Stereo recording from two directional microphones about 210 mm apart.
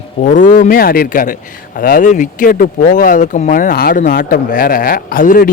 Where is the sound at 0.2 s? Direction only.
40° left (ahead or behind).